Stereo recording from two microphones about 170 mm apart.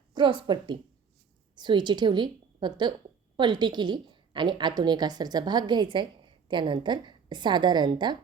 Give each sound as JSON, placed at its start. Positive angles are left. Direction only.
{"t": 0.1, "sound": "a woman's voice", "side_deg": -30}